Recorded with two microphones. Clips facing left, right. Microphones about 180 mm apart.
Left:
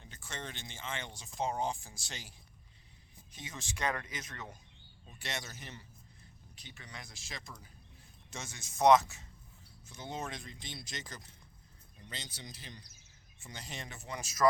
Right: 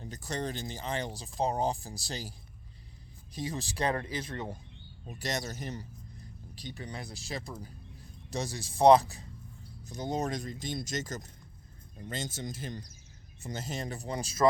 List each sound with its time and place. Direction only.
0.0 s speech: 40° right (ahead or behind)
3.3 s speech: 35° right (ahead or behind)